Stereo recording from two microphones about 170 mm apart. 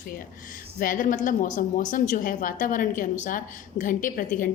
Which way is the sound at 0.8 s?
55° left (ahead or behind).